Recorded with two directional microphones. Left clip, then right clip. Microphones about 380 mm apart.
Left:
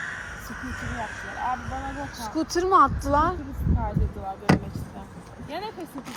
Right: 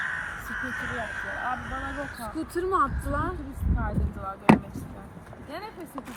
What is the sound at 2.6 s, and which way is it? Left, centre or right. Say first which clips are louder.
Speech: left 6 dB; centre.